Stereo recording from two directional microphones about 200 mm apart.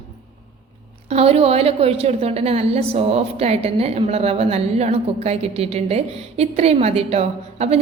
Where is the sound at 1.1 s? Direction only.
30° right (ahead or behind).